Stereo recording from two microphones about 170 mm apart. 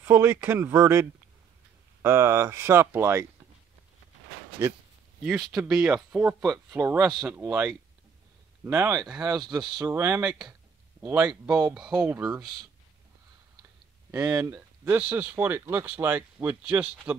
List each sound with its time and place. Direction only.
0.0 s speech: 15° right (ahead or behind)
5.5 s speech: 5° right (ahead or behind)
14.1 s speech: 15° right (ahead or behind)